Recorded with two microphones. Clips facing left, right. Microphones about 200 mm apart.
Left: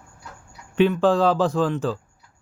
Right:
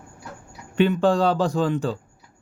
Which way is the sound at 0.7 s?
Centre (ahead or behind).